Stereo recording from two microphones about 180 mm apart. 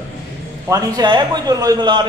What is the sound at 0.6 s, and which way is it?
A man's voice, 20° right (ahead or behind).